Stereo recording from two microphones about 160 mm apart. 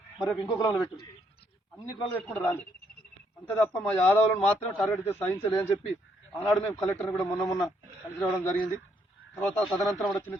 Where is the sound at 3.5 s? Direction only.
10° left (ahead or behind).